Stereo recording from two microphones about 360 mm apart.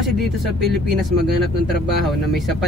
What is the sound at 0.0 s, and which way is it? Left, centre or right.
Speech, centre.